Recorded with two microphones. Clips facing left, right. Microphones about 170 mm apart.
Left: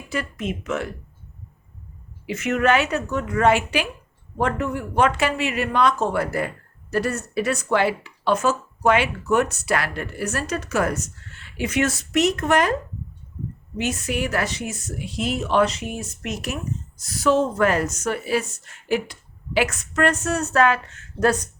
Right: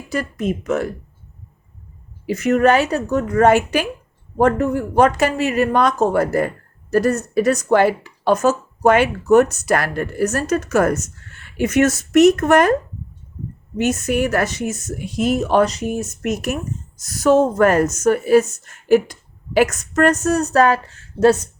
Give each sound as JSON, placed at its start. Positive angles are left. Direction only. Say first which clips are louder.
{"t": 0.1, "sound": "a woman's voice", "louder": "right 5 dB", "side_deg": -40}
{"t": 2.2, "sound": "a woman's voice", "louder": "right 6 dB", "side_deg": -40}
{"t": 13.7, "sound": "a woman's voice", "louder": "right 7 dB", "side_deg": -45}